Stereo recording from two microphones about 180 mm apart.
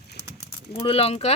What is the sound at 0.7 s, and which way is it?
Speech, 30° left (ahead or behind).